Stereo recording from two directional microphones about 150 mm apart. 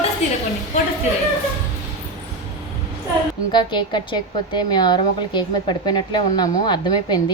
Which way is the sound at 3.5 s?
30° left (ahead or behind).